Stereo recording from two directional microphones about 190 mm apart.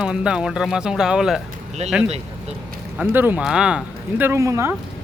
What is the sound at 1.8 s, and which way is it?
Speech, 35° right (ahead or behind).